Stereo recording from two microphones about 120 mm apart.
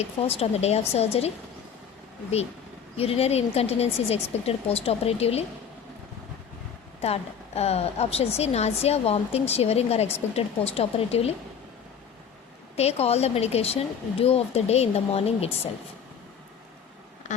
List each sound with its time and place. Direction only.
0.0 s a woman's voice: 60° left (ahead or behind)
3.0 s a woman's voice: 55° left (ahead or behind)
7.0 s a woman's voice: 60° left (ahead or behind)
12.7 s a woman's voice: 60° left (ahead or behind)